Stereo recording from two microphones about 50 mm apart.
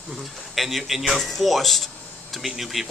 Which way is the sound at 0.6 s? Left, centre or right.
Centre.